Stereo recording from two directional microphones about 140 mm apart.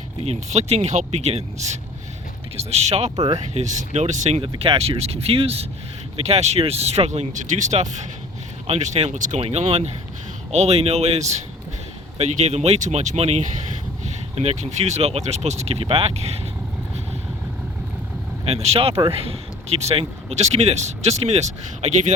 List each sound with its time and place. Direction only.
0.3 s speech: 50° right (ahead or behind)
3.2 s speech: 30° right (ahead or behind)
3.5 s speech: 55° right (ahead or behind)
9.4 s speech: 50° right (ahead or behind)
18.4 s speech: 45° right (ahead or behind)